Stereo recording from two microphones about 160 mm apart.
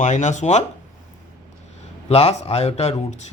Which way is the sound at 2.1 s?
40° left (ahead or behind).